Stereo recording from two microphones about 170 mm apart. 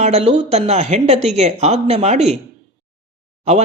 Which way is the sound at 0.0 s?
40° right (ahead or behind).